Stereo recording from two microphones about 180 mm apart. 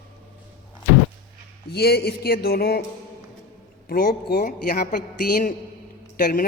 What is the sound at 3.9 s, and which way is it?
Speech, 55° left (ahead or behind).